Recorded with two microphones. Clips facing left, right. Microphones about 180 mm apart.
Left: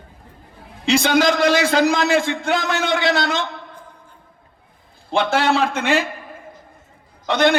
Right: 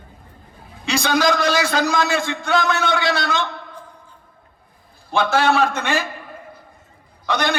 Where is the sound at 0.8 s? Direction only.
25° left (ahead or behind).